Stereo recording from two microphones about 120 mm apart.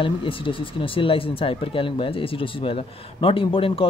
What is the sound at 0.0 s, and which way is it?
Speech, 45° left (ahead or behind).